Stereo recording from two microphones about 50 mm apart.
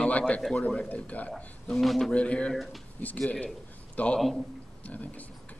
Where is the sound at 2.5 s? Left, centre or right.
Centre.